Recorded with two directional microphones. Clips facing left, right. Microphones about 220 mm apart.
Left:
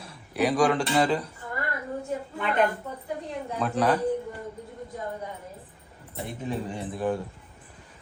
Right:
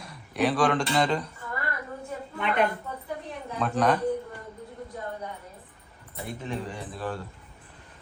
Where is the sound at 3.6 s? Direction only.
5° left (ahead or behind).